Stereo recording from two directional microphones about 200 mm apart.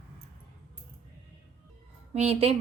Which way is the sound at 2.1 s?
30° right (ahead or behind).